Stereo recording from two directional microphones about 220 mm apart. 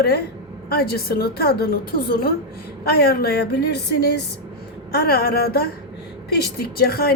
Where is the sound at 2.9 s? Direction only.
45° left (ahead or behind).